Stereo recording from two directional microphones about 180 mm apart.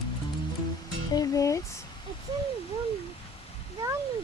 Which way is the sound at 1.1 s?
20° left (ahead or behind).